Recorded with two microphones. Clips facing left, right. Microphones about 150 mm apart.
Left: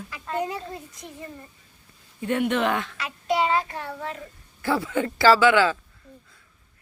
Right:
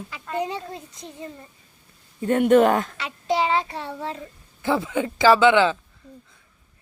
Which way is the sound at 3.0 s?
25° right (ahead or behind).